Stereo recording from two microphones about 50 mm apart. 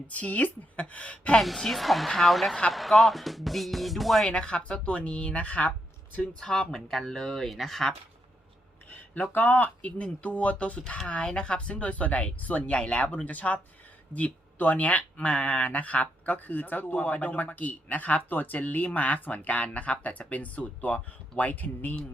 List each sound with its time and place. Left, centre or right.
0.1 s speech: left
1.4 s speech: centre
4.3 s speech: left
6.4 s speech: centre
8.9 s speech: left
9.6 s speech: left
13.2 s speech: left
14.6 s speech: left